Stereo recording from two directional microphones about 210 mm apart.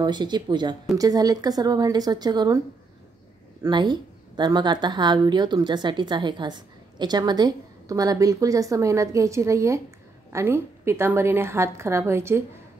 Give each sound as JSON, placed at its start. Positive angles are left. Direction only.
{"t": 0.0, "sound": "a woman's voice", "side_deg": -20}
{"t": 3.6, "sound": "a woman's voice", "side_deg": -20}